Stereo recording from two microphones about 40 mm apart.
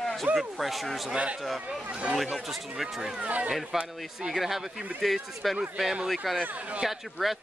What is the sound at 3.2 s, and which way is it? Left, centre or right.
Speech, right.